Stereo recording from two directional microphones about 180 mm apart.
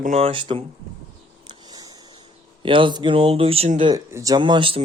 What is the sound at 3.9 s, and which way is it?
Speech, 20° right (ahead or behind).